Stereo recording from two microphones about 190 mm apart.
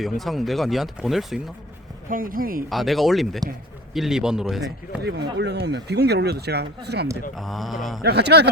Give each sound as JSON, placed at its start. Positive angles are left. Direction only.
{"t": 0.2, "sound": "speech", "side_deg": 0}
{"t": 2.0, "sound": "speech", "side_deg": -45}
{"t": 2.6, "sound": "speech", "side_deg": 0}
{"t": 5.4, "sound": "speech", "side_deg": -60}
{"t": 7.3, "sound": "speech", "side_deg": 0}
{"t": 8.0, "sound": "speech", "side_deg": -60}